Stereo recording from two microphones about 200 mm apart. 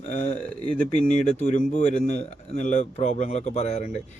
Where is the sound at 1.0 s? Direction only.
35° left (ahead or behind).